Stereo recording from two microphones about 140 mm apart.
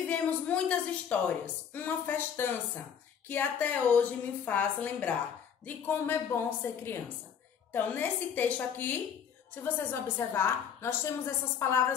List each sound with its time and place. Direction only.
0.0 s a woman's voice: 10° left (ahead or behind)